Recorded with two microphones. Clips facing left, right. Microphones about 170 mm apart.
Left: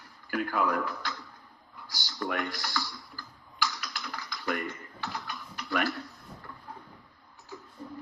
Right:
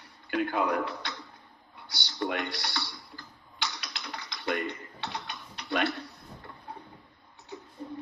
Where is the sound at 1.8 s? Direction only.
70° right (ahead or behind).